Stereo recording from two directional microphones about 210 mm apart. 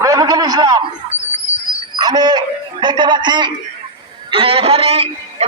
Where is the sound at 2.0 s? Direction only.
20° right (ahead or behind).